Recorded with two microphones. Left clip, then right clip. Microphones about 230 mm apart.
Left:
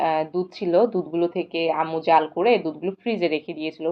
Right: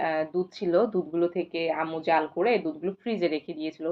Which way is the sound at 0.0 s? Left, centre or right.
Left.